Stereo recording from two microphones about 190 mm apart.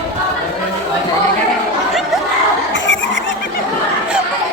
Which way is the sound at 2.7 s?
70° left (ahead or behind).